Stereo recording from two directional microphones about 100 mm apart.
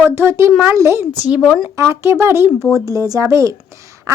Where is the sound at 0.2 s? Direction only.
25° right (ahead or behind).